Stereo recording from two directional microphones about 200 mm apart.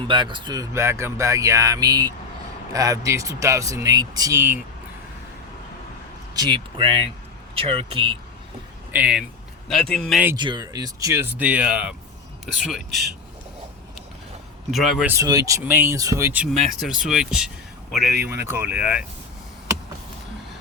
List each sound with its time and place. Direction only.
0.1 s speech: 25° right (ahead or behind)
6.3 s speech: 20° right (ahead or behind)
8.9 s speech: 5° right (ahead or behind)
10.3 s speech: 20° right (ahead or behind); by 13.1 s centre (ahead or behind)
14.7 s speech: centre (ahead or behind)